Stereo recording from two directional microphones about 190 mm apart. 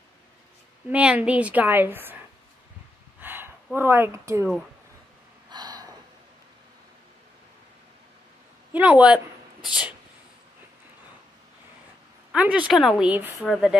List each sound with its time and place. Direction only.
0.8 s a woman's voice: 5° right (ahead or behind)
3.2 s a sound: 10° right (ahead or behind)
5.5 s gasp: 20° right (ahead or behind)
8.7 s a woman's voice: 10° right (ahead or behind)
12.3 s a woman's voice: 5° right (ahead or behind)